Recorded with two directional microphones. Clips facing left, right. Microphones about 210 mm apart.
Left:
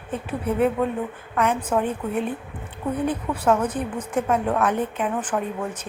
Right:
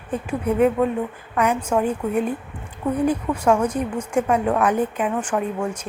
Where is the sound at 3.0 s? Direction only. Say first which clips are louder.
Right 2 dB; 10° right (ahead or behind).